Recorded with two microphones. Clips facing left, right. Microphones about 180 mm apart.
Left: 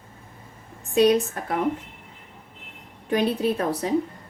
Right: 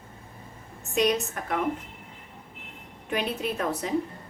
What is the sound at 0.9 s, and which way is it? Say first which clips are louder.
Speech: left 6 dB; 30° left (ahead or behind).